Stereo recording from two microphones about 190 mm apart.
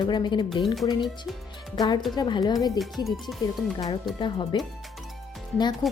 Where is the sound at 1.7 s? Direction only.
20° left (ahead or behind).